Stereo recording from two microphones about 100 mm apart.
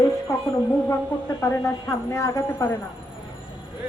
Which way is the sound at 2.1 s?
30° left (ahead or behind).